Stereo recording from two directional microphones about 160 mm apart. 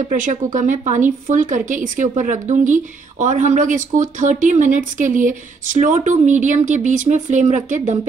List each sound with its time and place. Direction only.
0.1 s speech: 55° right (ahead or behind)